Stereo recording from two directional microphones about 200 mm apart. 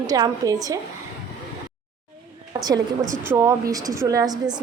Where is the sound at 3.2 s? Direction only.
15° right (ahead or behind).